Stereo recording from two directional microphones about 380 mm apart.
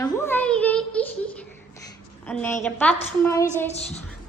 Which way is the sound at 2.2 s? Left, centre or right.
Centre.